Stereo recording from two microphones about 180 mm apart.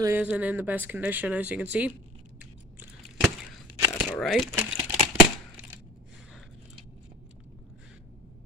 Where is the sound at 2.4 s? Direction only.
10° right (ahead or behind).